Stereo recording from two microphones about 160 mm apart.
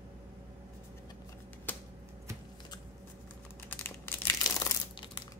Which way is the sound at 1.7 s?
10° left (ahead or behind).